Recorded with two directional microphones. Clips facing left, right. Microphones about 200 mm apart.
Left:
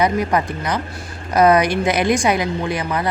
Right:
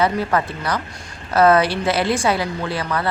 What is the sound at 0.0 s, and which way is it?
A woman's voice, 15° left (ahead or behind).